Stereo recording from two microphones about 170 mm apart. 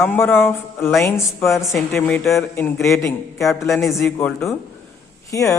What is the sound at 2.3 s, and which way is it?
Speech, 15° left (ahead or behind).